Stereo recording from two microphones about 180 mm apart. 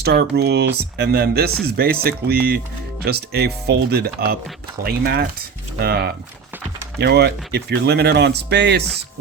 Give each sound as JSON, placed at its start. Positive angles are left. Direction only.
{"t": 0.0, "sound": "speech", "side_deg": -60}